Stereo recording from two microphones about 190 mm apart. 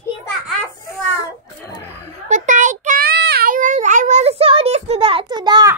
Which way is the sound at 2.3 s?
40° right (ahead or behind).